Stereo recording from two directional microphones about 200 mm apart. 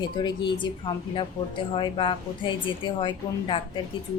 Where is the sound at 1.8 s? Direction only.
25° left (ahead or behind).